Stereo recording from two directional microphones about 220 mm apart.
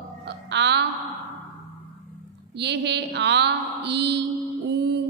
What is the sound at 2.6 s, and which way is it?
A woman's voice, 50° right (ahead or behind).